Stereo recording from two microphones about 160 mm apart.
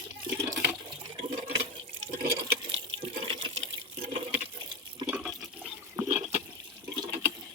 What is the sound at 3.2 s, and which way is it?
Water, 30° right (ahead or behind).